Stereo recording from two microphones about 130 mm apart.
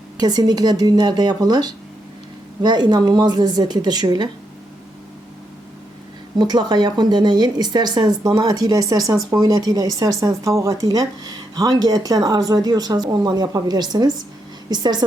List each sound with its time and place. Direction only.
0.2 s speech: 30° right (ahead or behind)
6.4 s speech: 35° right (ahead or behind)